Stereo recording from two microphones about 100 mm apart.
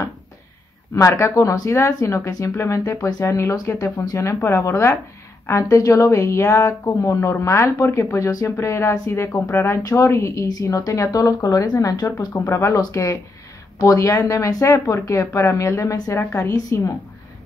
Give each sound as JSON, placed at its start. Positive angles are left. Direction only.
{"t": 0.9, "sound": "speech", "side_deg": 30}
{"t": 12.3, "sound": "speech", "side_deg": 30}